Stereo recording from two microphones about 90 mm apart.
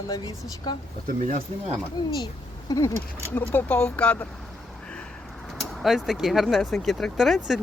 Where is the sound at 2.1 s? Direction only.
50° left (ahead or behind).